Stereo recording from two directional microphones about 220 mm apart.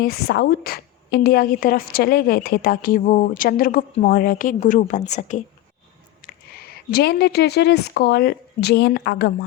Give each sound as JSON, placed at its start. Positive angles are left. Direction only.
{"t": 0.0, "sound": "a woman's voice", "side_deg": 45}
{"t": 6.2, "sound": "speech", "side_deg": 45}